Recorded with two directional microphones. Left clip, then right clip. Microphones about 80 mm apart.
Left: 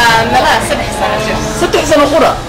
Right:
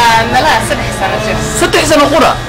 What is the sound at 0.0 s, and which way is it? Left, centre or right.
Music, centre.